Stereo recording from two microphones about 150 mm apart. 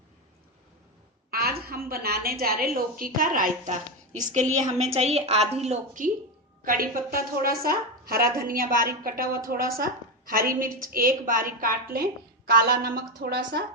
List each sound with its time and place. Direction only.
1.3 s a woman's voice: 90° right; by 6.1 s 50° right (ahead or behind)
6.7 s a woman's voice: 70° right (ahead or behind)
12.5 s a woman's voice: 90° right